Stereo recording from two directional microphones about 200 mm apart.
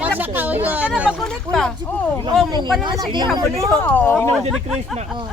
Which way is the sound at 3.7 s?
10° left (ahead or behind).